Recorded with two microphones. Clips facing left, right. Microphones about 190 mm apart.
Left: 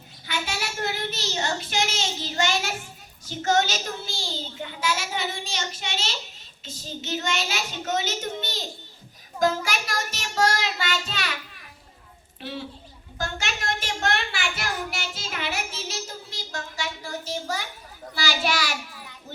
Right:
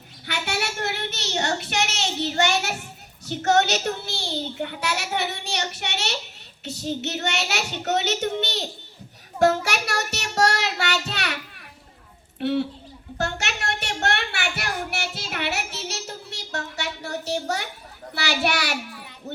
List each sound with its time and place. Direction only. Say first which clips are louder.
0.3 s a child's voice: right 3 dB; 65° right (ahead or behind)
9.4 s child singing: right 4 dB; 70° right (ahead or behind)
12.4 s a woman's voice: right 12 dB; 65° right (ahead or behind)
13.1 s child singing: right 3 dB; 65° right (ahead or behind)